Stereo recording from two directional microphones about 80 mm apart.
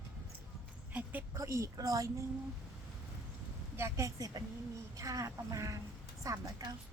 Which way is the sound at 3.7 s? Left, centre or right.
Right.